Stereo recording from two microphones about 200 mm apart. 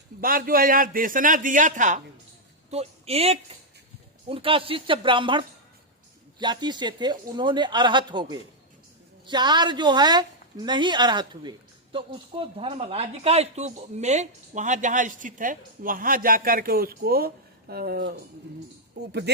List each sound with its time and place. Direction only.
0.2 s a man's voice: 45° right (ahead or behind)